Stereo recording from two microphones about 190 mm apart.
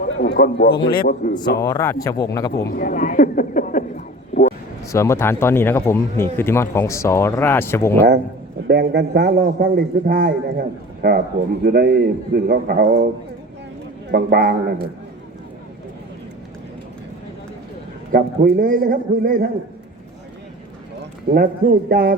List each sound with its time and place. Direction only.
0.0 s a man's voice: 55° left (ahead or behind)
0.8 s a man's voice: 25° left (ahead or behind)
1.0 s a man's voice: 50° left (ahead or behind)
1.4 s speech: 20° left (ahead or behind)
2.6 s a sound: 55° left (ahead or behind)
4.9 s speech: 15° left (ahead or behind)
8.6 s a man's voice: 60° right (ahead or behind)
14.1 s a man's voice: 55° right (ahead or behind)
18.1 s a man's voice: 50° right (ahead or behind)
21.0 s speech: 50° right (ahead or behind)